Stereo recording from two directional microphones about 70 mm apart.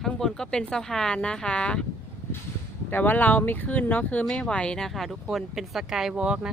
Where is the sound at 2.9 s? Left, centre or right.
Left.